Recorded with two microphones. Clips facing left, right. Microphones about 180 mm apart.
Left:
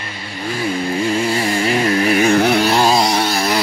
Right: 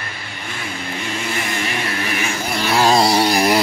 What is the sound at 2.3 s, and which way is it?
Chainsaw, 65° left (ahead or behind).